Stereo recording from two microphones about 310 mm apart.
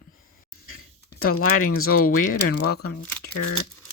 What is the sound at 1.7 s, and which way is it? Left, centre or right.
Speech, left.